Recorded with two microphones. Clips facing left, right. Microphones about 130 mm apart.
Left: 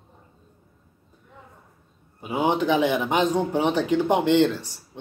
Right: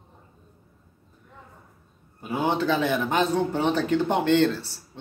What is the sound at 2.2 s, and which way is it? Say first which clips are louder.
A man's voice: left 2 dB; 15° left (ahead or behind).